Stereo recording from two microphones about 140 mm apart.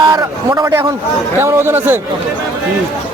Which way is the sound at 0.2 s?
20° right (ahead or behind).